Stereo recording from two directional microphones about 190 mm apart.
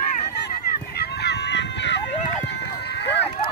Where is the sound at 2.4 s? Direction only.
60° left (ahead or behind).